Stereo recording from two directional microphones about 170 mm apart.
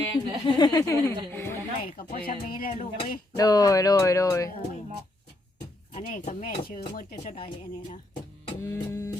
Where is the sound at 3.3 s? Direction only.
20° left (ahead or behind).